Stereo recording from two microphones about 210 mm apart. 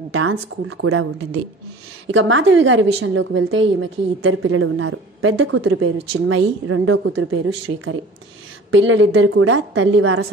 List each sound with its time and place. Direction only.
0.1 s speech: 80° right
2.0 s a woman's voice: 75° right (ahead or behind)